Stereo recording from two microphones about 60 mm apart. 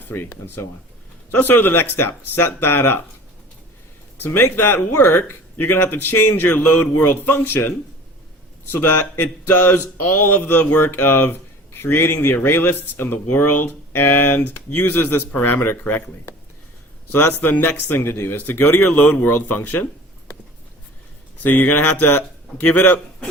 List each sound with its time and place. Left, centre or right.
0.0 s speech: left
4.2 s speech: left
8.7 s speech: left
10.8 s speech: left
18.9 s speech: left
21.4 s speech: left